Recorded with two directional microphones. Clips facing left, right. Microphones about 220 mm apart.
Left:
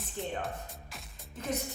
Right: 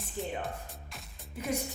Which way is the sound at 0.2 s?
Centre (ahead or behind).